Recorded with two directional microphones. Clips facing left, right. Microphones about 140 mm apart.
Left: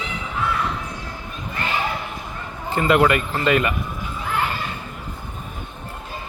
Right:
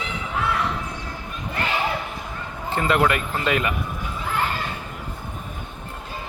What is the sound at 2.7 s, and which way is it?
Speech, centre (ahead or behind).